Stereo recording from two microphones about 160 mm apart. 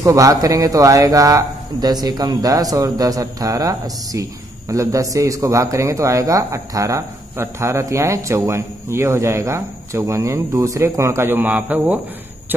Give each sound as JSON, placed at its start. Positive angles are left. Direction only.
{"t": 0.0, "sound": "a man's voice", "side_deg": -20}